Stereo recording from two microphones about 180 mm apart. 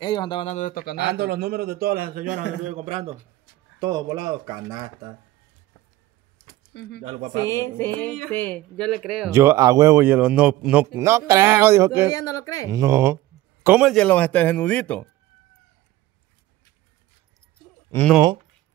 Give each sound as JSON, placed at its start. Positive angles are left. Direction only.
{"t": 0.0, "sound": "speech", "side_deg": 25}
{"t": 0.6, "sound": "speech", "side_deg": 50}
{"t": 1.0, "sound": "a man's voice", "side_deg": -60}
{"t": 2.6, "sound": "speech", "side_deg": -40}
{"t": 3.8, "sound": "speech", "side_deg": -20}
{"t": 6.7, "sound": "speech", "side_deg": 70}
{"t": 7.0, "sound": "speech", "side_deg": -45}
{"t": 7.3, "sound": "speech", "side_deg": 15}
{"t": 9.3, "sound": "a man's voice", "side_deg": -15}
{"t": 12.1, "sound": "speech", "side_deg": 20}
{"t": 12.6, "sound": "a man's voice", "side_deg": -15}
{"t": 13.9, "sound": "speech", "side_deg": 10}